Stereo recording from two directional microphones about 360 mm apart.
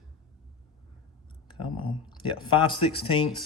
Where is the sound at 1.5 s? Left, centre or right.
Centre.